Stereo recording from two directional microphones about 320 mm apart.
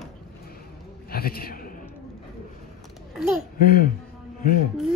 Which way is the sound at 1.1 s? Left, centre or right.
Left.